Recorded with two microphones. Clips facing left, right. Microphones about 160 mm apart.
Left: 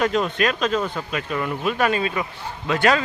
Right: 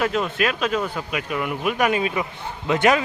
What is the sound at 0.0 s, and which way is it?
A man's voice, 5° right (ahead or behind).